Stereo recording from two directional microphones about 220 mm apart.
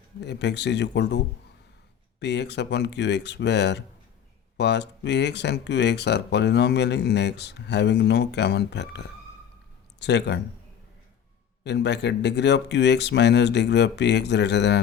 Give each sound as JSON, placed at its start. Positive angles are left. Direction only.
{"t": 0.2, "sound": "speech", "side_deg": 50}
{"t": 11.6, "sound": "speech", "side_deg": 50}